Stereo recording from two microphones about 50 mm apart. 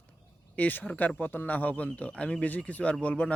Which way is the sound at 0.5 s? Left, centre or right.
Left.